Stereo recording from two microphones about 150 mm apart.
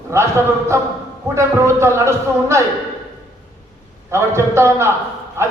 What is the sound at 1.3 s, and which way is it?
A man's voice, 20° right (ahead or behind).